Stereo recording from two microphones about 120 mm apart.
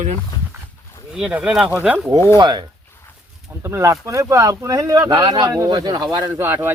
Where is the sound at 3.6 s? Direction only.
25° right (ahead or behind).